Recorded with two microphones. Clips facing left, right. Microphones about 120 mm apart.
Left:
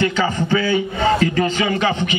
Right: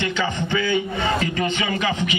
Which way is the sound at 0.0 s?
40° left (ahead or behind).